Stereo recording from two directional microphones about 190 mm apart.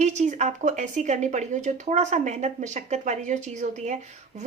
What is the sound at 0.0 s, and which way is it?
Speech, 40° right (ahead or behind).